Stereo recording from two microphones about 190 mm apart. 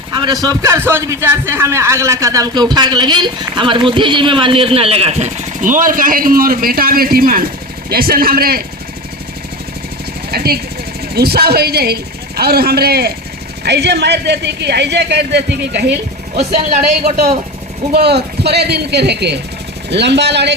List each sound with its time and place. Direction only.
0.2 s a man's voice: 20° right (ahead or behind); by 8.6 s 55° right (ahead or behind)
10.3 s speech: 55° right (ahead or behind)
17.0 s speech: 35° right (ahead or behind)
17.9 s speech: 55° right (ahead or behind)